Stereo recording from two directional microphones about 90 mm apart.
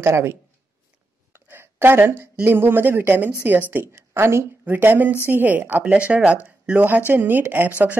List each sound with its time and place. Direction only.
0.0 s a woman's voice: 30° right (ahead or behind)